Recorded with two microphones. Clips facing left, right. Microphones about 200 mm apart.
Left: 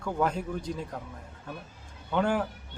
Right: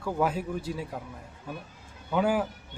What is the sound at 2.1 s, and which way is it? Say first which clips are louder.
Speech: right 1 dB; 5° right (ahead or behind).